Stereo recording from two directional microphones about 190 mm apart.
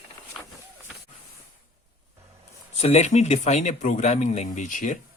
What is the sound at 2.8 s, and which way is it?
Speech, 35° left (ahead or behind).